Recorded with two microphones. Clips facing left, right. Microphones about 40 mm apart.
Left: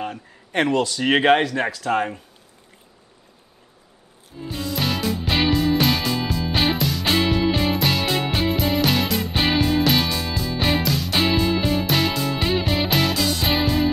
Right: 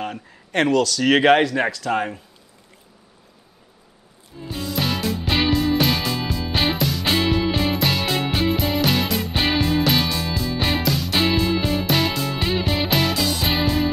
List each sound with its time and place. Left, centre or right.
0.7 s speech: left
1.6 s speech: centre
4.4 s music: centre